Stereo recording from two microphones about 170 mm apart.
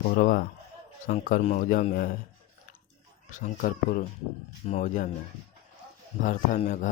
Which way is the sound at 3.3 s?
50° left (ahead or behind).